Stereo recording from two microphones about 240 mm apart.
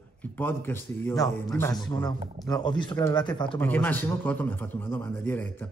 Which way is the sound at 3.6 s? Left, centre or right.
Centre.